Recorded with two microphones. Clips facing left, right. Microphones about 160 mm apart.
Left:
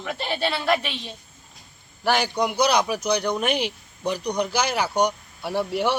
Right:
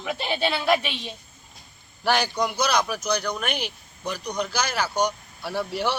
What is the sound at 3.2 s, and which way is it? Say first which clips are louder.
Speech: left 5 dB; 25° left (ahead or behind).